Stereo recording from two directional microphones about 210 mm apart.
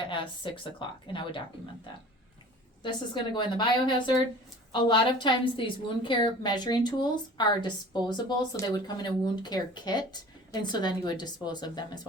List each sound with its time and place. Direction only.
0.1 s speech: 25° left (ahead or behind)
3.3 s speech: 20° left (ahead or behind)